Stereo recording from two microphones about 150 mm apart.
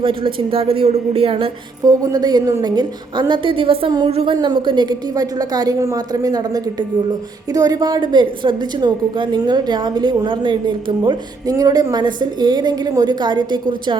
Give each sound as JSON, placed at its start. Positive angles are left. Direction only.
{"t": 0.0, "sound": "speech", "side_deg": -35}
{"t": 1.8, "sound": "a woman's voice", "side_deg": -25}